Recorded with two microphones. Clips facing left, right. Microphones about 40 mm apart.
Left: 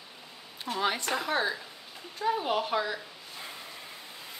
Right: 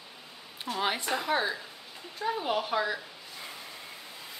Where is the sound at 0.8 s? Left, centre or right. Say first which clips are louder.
Left 1 dB; centre.